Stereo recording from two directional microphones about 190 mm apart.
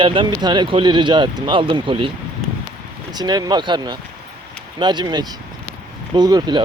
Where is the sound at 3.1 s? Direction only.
20° right (ahead or behind).